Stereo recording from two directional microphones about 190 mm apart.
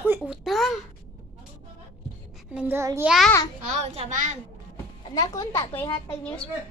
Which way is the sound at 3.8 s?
35° right (ahead or behind).